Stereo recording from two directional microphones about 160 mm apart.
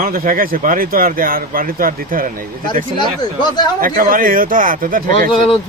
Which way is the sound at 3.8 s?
60° right (ahead or behind).